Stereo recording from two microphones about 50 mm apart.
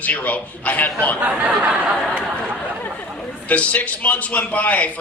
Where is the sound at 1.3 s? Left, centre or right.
Right.